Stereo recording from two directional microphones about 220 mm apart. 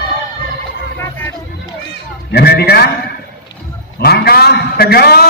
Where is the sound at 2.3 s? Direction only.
45° left (ahead or behind).